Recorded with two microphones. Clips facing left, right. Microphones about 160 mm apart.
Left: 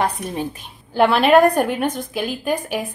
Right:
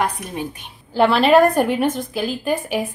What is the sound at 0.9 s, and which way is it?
A woman's voice, centre (ahead or behind).